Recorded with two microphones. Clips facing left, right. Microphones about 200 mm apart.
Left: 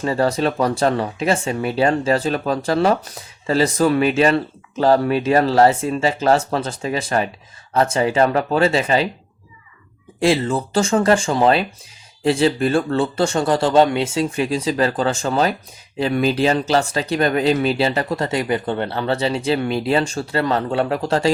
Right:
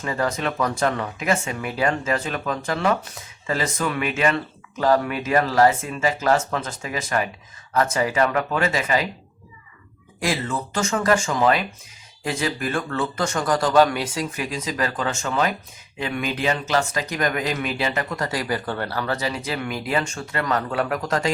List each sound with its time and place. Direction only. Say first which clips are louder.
0.0 s speech: left 6 dB; 30° left (ahead or behind)
10.2 s speech: left 8 dB; 30° left (ahead or behind)